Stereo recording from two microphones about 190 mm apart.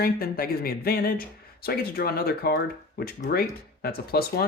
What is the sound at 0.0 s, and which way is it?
Speech, 50° left (ahead or behind).